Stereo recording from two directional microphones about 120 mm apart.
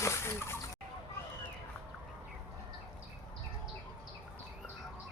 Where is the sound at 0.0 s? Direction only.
25° left (ahead or behind).